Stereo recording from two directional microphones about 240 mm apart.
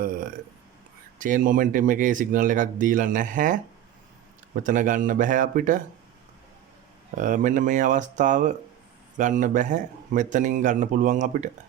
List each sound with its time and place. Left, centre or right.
1.2 s speech: right
7.2 s speech: right